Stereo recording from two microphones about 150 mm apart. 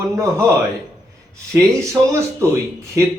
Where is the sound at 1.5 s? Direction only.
20° right (ahead or behind).